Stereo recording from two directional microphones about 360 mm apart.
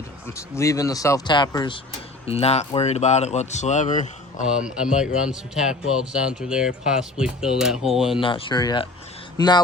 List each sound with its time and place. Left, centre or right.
0.3 s speech: centre
4.4 s speech: centre
8.2 s speech: centre